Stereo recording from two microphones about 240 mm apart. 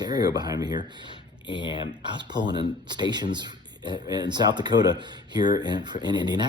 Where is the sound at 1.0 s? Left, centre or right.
Centre.